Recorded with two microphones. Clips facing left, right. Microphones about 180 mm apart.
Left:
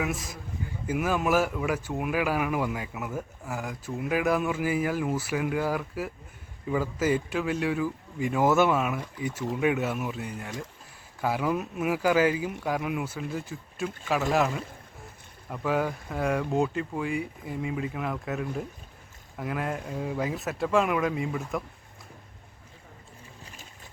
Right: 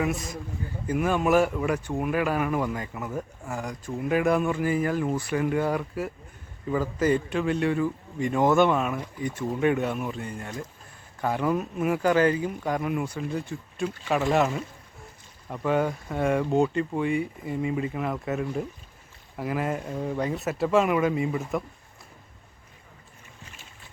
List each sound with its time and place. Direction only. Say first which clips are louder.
0.0 s speech: right 3 dB; centre (ahead or behind)